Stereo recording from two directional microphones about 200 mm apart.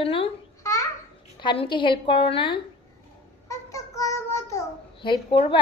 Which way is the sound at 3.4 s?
15° left (ahead or behind).